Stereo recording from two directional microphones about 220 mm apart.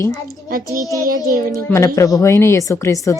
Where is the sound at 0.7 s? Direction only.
15° right (ahead or behind).